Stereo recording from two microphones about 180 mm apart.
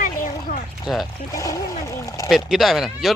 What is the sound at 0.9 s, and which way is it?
Speech, centre (ahead or behind).